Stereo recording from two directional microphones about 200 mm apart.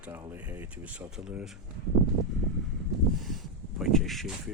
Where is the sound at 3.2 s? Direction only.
Centre (ahead or behind).